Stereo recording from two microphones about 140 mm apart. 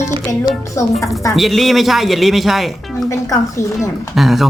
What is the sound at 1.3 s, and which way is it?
Speech, centre (ahead or behind).